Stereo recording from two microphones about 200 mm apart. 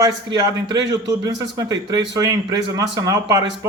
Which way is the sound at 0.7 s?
20° right (ahead or behind).